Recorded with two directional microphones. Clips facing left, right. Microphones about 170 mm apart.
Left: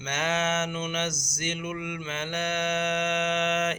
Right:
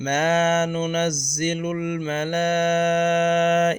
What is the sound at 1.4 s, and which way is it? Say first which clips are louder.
Mantra: right 9 dB; 40° right (ahead or behind).